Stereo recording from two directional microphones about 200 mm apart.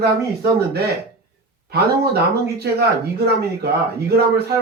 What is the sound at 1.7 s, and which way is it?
Speech, 55° right (ahead or behind).